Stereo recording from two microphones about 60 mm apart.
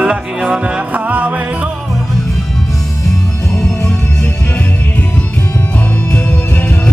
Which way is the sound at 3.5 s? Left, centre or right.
Centre.